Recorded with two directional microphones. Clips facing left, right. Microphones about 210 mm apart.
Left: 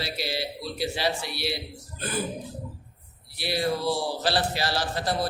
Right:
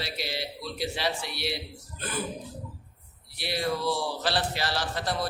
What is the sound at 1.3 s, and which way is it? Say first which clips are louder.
Speech: left 2 dB; 5° left (ahead or behind).